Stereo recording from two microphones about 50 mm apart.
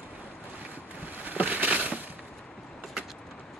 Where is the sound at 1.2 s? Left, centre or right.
Right.